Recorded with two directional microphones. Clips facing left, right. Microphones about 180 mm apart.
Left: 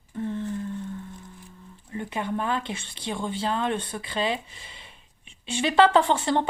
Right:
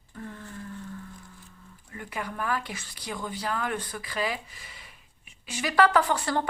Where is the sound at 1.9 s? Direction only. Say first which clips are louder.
Left 7 dB; 25° left (ahead or behind).